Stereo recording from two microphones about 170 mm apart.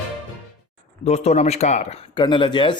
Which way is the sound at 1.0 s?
40° left (ahead or behind).